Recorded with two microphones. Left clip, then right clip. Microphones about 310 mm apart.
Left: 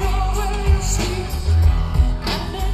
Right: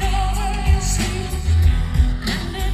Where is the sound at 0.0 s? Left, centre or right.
Left.